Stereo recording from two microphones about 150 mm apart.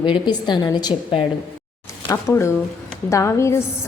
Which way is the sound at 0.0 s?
30° left (ahead or behind).